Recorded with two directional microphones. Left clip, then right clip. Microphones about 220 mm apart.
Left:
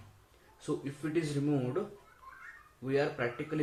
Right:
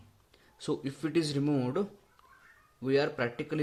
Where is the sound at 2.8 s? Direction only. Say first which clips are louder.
Right 3 dB; 45° right (ahead or behind).